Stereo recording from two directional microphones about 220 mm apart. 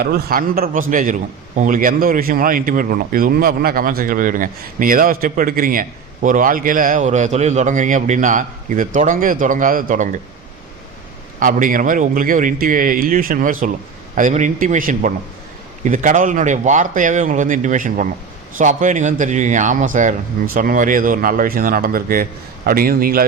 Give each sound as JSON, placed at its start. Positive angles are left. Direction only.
{"t": 0.0, "sound": "a man's voice", "side_deg": -45}
{"t": 11.3, "sound": "a man's voice", "side_deg": -40}